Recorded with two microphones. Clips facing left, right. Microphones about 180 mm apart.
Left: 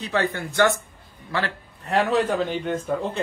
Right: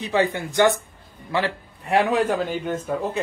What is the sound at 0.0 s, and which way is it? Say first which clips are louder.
A man's voice: right 3 dB; 15° right (ahead or behind).